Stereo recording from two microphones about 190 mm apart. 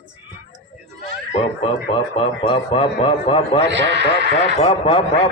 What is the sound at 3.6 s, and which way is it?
Speech, 70° right (ahead or behind).